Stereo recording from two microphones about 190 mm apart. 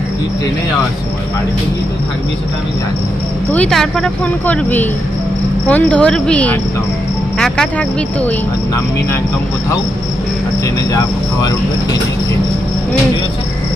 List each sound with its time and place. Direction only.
3.5 s speech: 5° left (ahead or behind)
10.9 s speech: 20° left (ahead or behind)